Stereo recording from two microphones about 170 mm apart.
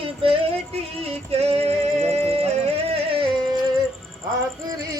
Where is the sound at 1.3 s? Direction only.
40° right (ahead or behind).